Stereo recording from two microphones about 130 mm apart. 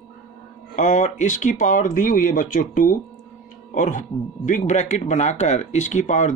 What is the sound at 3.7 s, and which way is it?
Speech, 75° left (ahead or behind).